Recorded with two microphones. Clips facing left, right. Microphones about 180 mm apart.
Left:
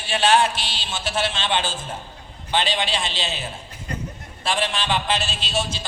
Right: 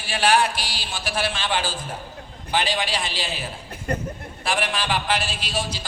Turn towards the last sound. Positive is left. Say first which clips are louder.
# left 2 dB
turn(degrees=25)  # may be behind; listen again after turning